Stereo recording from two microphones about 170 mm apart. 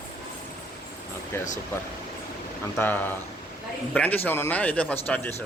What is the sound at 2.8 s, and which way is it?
Speech, 10° left (ahead or behind).